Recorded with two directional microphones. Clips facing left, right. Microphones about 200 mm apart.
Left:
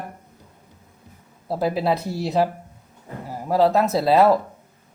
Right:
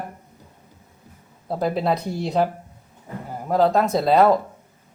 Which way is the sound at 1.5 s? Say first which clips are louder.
Even; 5° left (ahead or behind).